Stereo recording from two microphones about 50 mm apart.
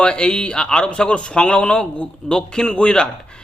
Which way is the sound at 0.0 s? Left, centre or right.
Centre.